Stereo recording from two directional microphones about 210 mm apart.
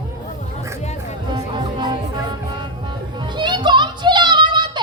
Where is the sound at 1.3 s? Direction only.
20° right (ahead or behind).